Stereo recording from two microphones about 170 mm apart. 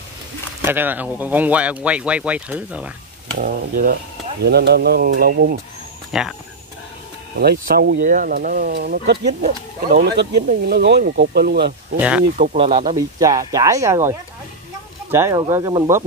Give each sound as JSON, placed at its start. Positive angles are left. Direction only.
{"t": 0.7, "sound": "speech", "side_deg": -10}
{"t": 3.3, "sound": "speech", "side_deg": -60}
{"t": 4.5, "sound": "speech", "side_deg": -70}
{"t": 6.1, "sound": "speech", "side_deg": 0}
{"t": 7.3, "sound": "speech", "side_deg": -70}
{"t": 8.0, "sound": "speech", "side_deg": -55}
{"t": 9.8, "sound": "speech", "side_deg": -55}
{"t": 12.0, "sound": "speech", "side_deg": -10}
{"t": 12.5, "sound": "speech", "side_deg": -30}